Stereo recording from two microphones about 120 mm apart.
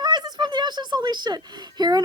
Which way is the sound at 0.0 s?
35° right (ahead or behind).